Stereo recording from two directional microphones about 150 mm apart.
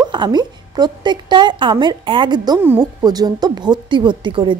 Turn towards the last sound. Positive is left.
turn(degrees=-30)  # may be behind; listen again after turning